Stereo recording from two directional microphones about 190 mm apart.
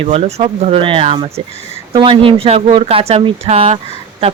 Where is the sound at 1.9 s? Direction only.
25° right (ahead or behind).